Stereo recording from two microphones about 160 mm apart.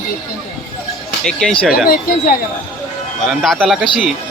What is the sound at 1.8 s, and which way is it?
Speech, 65° left (ahead or behind).